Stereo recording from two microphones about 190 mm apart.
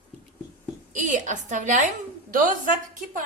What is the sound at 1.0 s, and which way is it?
Speech, 40° right (ahead or behind).